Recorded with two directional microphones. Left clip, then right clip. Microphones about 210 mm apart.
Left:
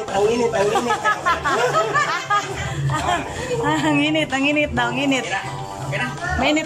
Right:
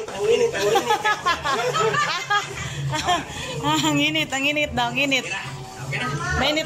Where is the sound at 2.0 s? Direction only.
Centre (ahead or behind).